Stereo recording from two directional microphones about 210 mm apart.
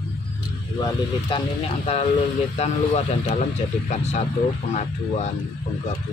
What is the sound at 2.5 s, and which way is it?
Speech, 30° left (ahead or behind).